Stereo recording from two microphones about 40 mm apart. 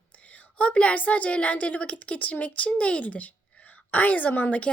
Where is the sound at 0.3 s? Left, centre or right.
Left.